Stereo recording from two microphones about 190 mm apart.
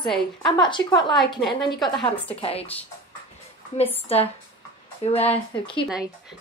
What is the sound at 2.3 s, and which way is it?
Speech, 30° left (ahead or behind).